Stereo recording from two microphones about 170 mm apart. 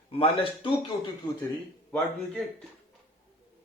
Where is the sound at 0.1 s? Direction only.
30° left (ahead or behind).